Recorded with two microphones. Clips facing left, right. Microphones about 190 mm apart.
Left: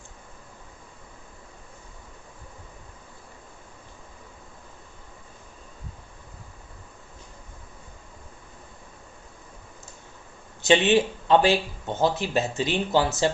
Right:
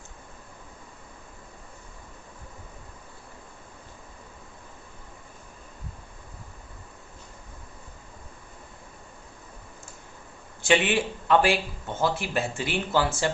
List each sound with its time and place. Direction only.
10.6 s speech: 20° left (ahead or behind)